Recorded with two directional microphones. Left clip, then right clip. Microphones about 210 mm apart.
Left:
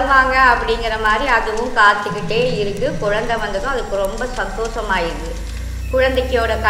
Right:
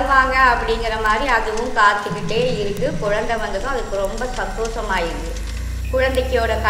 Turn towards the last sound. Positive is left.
turn(degrees=5)  # may be behind; listen again after turning